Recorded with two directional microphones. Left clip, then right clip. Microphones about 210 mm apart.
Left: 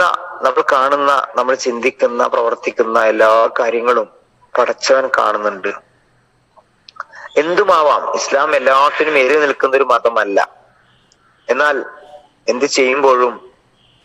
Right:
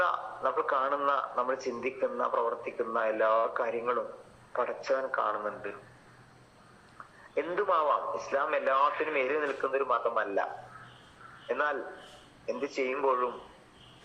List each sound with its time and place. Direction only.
0.0 s a man's voice: 50° left (ahead or behind)
7.3 s a man's voice: 50° left (ahead or behind)